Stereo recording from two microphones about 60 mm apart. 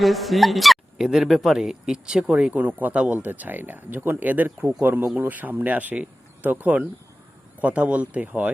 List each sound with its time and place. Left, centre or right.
0.0 s speech: centre
2.5 s speech: right